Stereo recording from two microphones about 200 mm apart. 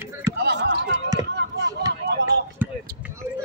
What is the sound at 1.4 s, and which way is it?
Chop, 60° right (ahead or behind).